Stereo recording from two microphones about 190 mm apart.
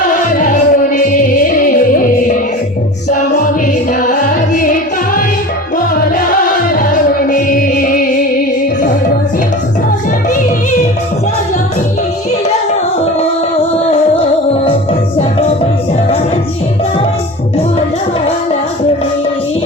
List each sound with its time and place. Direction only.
0.3 s music: 45° left (ahead or behind)
4.0 s music: 45° left (ahead or behind)
6.7 s music: 45° left (ahead or behind)
14.2 s music: 30° left (ahead or behind)